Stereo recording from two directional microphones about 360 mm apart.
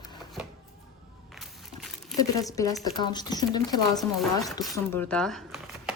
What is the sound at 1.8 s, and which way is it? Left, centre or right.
Speech, centre.